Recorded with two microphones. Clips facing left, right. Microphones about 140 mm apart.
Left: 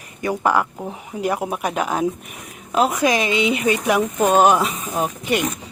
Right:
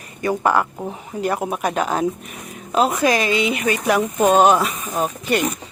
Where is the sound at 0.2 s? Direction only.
10° left (ahead or behind).